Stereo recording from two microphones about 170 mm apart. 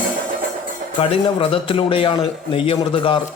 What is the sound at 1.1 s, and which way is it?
A man's voice, 30° left (ahead or behind).